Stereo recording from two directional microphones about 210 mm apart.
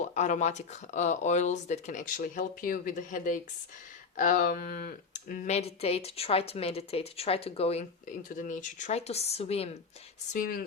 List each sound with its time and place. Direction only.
0.0 s speech: 35° left (ahead or behind)